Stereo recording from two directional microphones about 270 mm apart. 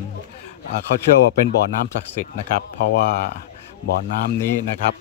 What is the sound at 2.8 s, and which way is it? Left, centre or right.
Speech, left.